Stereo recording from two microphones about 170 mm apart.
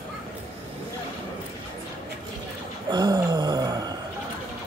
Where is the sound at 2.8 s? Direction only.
25° right (ahead or behind).